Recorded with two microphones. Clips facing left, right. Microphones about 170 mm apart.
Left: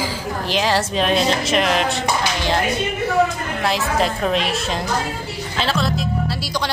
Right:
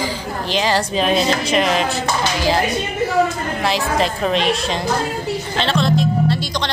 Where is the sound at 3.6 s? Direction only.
Centre (ahead or behind).